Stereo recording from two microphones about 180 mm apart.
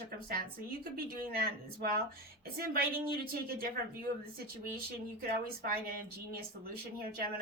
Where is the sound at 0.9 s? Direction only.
60° right (ahead or behind).